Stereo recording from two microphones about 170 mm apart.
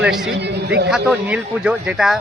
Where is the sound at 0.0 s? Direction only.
5° right (ahead or behind).